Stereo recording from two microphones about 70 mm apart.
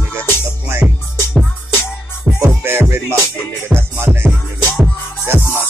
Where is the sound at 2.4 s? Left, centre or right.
Right.